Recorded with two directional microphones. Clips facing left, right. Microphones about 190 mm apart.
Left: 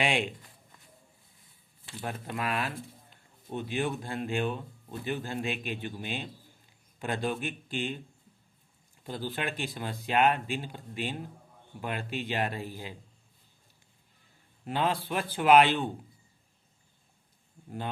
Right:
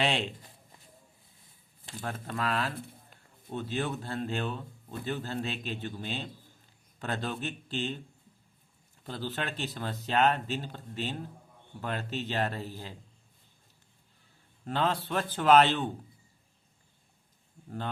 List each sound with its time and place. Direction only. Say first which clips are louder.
0.0 s speech: left 1 dB; 10° left (ahead or behind)
2.0 s speech: even; 15° left (ahead or behind)
9.0 s speech: left 1 dB; 10° left (ahead or behind)
14.6 s speech: even; 10° left (ahead or behind)